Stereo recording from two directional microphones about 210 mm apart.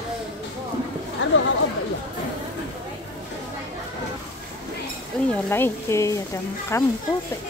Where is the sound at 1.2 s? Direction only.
60° left (ahead or behind).